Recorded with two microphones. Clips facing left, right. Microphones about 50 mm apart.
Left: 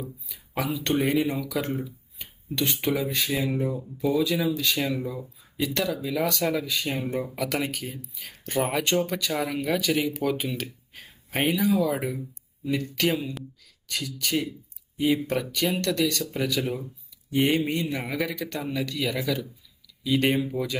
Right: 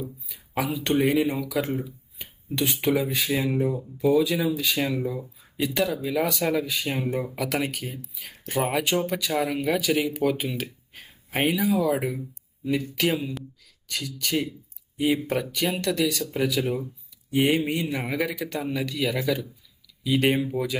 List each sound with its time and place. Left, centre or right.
0.3 s speech: centre
14.9 s speech: centre